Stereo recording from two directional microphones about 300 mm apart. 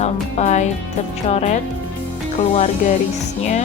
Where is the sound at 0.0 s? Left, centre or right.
Left.